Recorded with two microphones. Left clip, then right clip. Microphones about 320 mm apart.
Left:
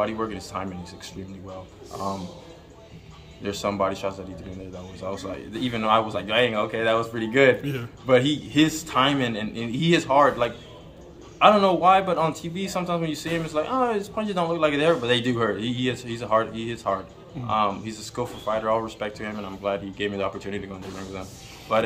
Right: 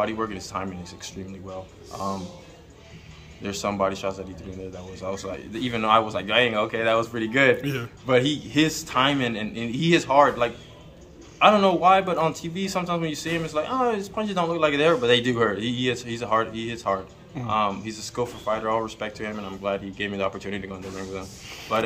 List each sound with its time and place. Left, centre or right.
0.0 s a man's voice: centre
3.4 s a man's voice: centre